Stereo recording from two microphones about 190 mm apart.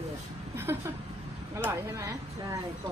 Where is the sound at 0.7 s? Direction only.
15° right (ahead or behind).